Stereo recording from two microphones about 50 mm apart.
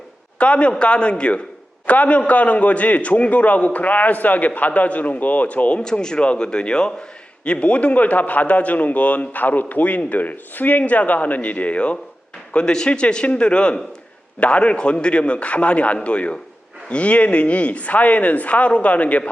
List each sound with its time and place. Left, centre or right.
0.3 s a man's voice: left
5.8 s a man's voice: centre